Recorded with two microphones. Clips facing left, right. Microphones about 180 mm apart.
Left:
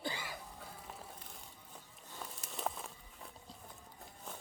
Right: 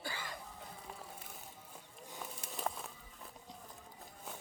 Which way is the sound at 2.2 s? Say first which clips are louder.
Even; centre (ahead or behind).